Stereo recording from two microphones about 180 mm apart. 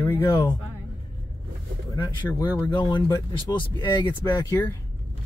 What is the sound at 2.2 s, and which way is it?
Speech, 10° left (ahead or behind).